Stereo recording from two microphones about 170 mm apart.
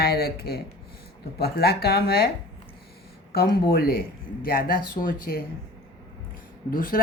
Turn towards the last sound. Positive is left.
turn(degrees=55)  # may be behind; listen again after turning